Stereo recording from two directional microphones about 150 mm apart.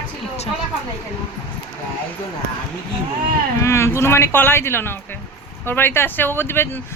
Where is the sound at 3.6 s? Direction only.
20° left (ahead or behind).